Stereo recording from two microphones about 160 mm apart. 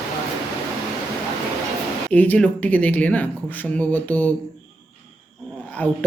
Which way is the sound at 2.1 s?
10° left (ahead or behind).